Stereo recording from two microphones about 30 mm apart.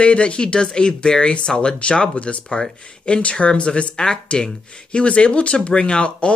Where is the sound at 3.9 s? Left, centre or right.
Left.